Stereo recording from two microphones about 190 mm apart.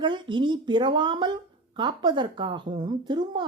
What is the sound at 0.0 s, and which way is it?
A woman's voice, 25° right (ahead or behind).